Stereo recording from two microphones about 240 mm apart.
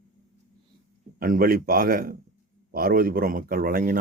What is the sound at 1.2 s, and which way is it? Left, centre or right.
Speech, right.